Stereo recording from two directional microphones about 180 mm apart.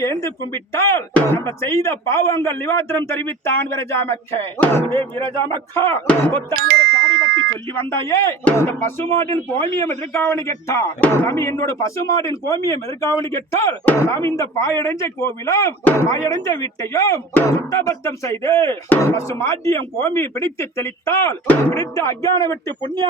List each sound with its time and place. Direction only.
0.0 s speech: 15° left (ahead or behind)
6.5 s ding: 60° right (ahead or behind)
7.7 s speech: 15° left (ahead or behind)
10.1 s speech: 15° left (ahead or behind)